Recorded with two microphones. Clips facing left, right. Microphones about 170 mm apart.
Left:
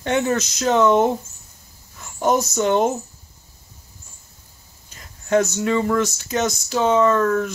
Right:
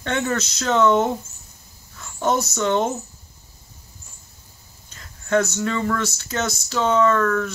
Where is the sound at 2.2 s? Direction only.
15° left (ahead or behind).